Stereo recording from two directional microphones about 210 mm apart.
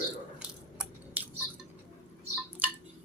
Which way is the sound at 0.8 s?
10° right (ahead or behind).